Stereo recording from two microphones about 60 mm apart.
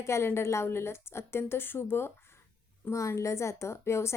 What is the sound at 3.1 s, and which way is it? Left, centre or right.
Speech, left.